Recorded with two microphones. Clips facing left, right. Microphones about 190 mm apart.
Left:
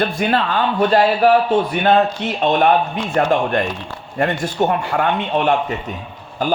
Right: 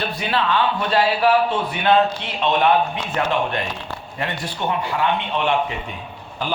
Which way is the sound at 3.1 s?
45° left (ahead or behind).